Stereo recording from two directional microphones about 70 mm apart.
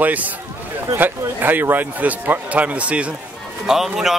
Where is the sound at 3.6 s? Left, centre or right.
Centre.